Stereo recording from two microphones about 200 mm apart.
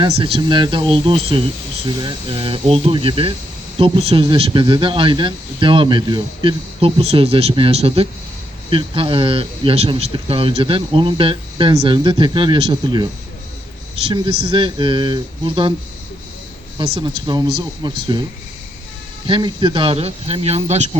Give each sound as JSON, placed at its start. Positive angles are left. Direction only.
{"t": 0.2, "sound": "speech", "side_deg": -25}
{"t": 14.1, "sound": "speech", "side_deg": -25}
{"t": 16.7, "sound": "speech", "side_deg": -25}
{"t": 19.3, "sound": "speech", "side_deg": -20}